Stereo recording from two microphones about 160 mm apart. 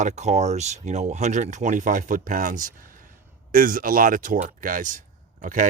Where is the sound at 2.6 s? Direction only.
60° right (ahead or behind).